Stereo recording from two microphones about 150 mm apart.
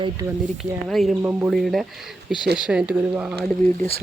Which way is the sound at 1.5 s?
Centre (ahead or behind).